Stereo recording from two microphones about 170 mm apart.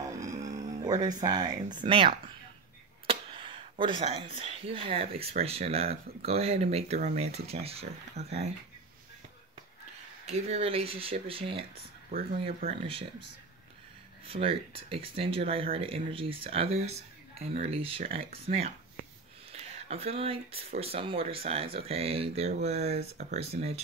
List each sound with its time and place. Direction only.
0.2 s music: 20° right (ahead or behind)
0.8 s speech: 25° right (ahead or behind)
3.1 s a sound: 35° right (ahead or behind)
5.1 s speech: 35° right (ahead or behind)
10.2 s speech: 35° right (ahead or behind)
12.6 s speech: 30° right (ahead or behind)
14.2 s speech: 35° right (ahead or behind)